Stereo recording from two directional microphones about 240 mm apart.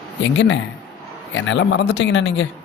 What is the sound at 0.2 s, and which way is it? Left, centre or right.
Speech, left.